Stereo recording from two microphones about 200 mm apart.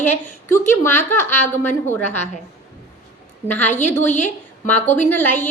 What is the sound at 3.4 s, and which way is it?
Speech, 10° left (ahead or behind).